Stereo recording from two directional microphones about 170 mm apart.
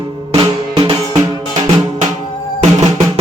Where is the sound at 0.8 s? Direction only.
25° right (ahead or behind).